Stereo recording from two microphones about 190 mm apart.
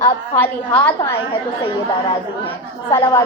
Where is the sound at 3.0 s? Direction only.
25° left (ahead or behind).